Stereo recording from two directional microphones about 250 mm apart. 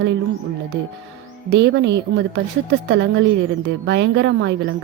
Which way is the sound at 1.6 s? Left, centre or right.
Right.